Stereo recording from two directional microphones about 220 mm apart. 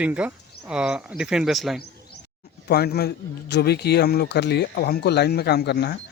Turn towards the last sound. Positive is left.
turn(degrees=50)  # may be behind; listen again after turning